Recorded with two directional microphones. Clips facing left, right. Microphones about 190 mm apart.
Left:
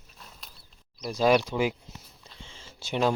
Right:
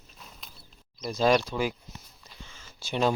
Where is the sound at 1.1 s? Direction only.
10° left (ahead or behind).